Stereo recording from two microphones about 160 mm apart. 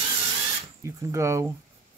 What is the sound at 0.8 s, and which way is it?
Speech, 20° right (ahead or behind).